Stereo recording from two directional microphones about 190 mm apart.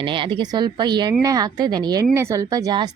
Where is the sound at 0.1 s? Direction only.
25° right (ahead or behind).